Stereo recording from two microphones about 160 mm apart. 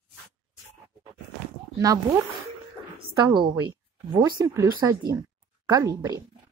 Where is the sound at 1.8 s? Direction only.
20° right (ahead or behind).